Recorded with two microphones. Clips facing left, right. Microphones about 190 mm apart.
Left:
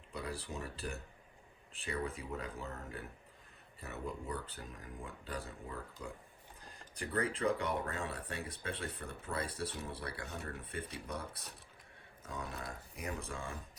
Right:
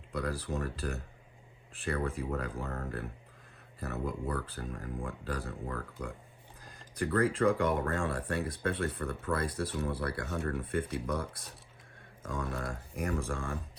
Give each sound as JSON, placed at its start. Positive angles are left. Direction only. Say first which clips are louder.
{"t": 0.1, "sound": "speech", "louder": "right 7 dB", "side_deg": -65}